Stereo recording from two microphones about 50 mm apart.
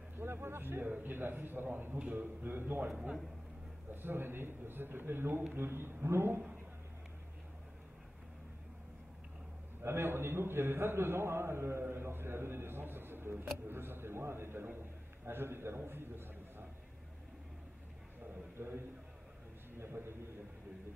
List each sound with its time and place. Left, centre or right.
0.2 s a man's voice: right
3.9 s a man's voice: right
9.8 s a man's voice: right
11.8 s a man's voice: right
18.6 s a man's voice: right
19.8 s a sound: right